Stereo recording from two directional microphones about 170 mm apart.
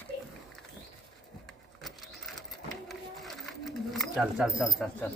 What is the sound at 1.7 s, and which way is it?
Sewing machine, centre (ahead or behind).